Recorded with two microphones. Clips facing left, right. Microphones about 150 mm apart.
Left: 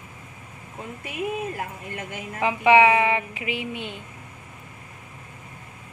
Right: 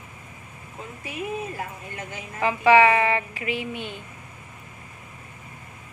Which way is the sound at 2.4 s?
20° left (ahead or behind).